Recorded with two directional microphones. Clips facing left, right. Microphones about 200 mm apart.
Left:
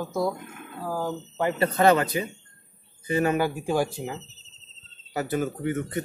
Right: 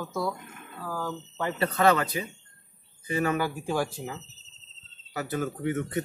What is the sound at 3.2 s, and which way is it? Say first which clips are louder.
Speech: left 3 dB; 20° left (ahead or behind).